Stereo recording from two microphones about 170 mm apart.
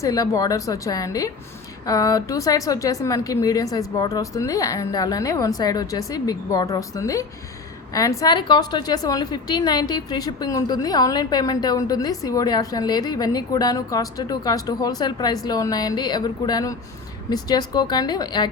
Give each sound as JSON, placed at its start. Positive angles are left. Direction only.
{"t": 0.0, "sound": "a woman's voice", "side_deg": 20}